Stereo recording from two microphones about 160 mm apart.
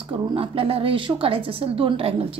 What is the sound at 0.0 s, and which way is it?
A woman's voice, 35° right (ahead or behind).